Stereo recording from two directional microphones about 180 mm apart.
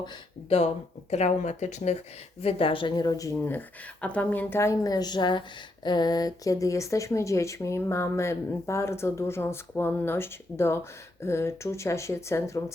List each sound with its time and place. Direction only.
0.0 s speech: 35° left (ahead or behind); by 12.7 s 15° left (ahead or behind)